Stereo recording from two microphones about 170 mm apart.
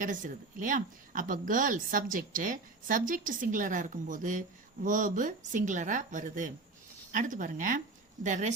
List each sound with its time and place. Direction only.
0.0 s a woman's voice: 50° right (ahead or behind)